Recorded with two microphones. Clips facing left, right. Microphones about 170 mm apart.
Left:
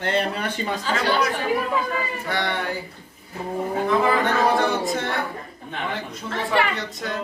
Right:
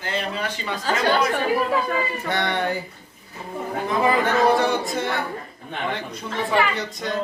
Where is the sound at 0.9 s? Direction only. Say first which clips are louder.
Right 3 dB; 45° right (ahead or behind).